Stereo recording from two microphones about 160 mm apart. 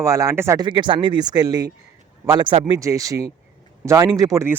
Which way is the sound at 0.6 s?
30° right (ahead or behind).